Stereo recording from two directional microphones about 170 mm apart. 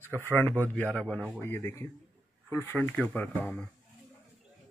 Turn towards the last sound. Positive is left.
turn(degrees=5)  # may be behind; listen again after turning